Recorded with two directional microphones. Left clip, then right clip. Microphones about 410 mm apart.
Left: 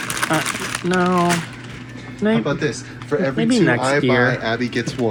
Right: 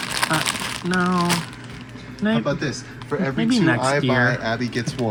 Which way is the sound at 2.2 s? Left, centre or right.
Centre.